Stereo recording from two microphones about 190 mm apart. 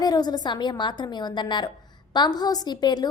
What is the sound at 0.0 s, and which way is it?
A woman's voice, 20° left (ahead or behind).